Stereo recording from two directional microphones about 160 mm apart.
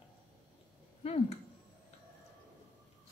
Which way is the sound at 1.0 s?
40° left (ahead or behind).